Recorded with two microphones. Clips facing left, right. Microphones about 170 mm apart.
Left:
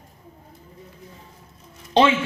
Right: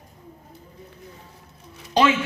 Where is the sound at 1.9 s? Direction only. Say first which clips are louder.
Left 2 dB; 25° left (ahead or behind).